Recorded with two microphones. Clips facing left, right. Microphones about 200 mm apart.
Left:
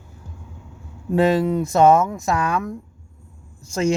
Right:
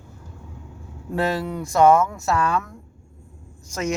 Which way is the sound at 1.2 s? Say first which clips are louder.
Left 7 dB; 20° left (ahead or behind).